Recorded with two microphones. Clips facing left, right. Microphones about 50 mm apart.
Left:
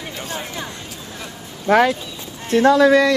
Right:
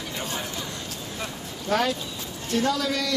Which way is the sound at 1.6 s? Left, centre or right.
Left.